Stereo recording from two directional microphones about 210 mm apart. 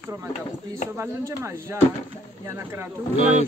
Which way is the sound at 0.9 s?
10° right (ahead or behind).